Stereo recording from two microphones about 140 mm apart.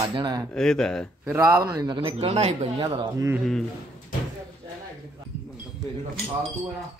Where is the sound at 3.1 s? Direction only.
20° right (ahead or behind).